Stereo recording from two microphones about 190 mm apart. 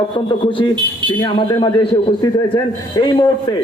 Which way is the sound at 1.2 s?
25° left (ahead or behind).